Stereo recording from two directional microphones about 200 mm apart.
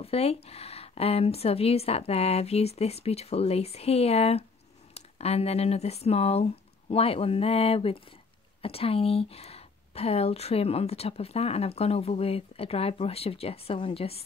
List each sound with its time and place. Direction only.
0.0 s speech: 30° left (ahead or behind)